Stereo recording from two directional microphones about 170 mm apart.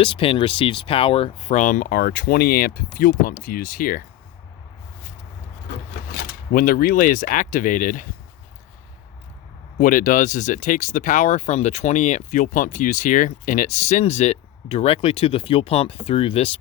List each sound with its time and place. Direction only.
0.0 s speech: 30° left (ahead or behind)
1.5 s speech: 50° left (ahead or behind)
6.1 s speech: 55° left (ahead or behind)
9.7 s speech: 50° left (ahead or behind); by 16.5 s 35° left (ahead or behind)